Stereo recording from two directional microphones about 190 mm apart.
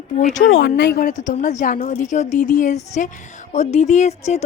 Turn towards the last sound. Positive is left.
turn(degrees=35)  # may be behind; listen again after turning